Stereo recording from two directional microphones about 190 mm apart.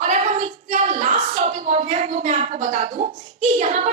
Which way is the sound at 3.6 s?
40° right (ahead or behind).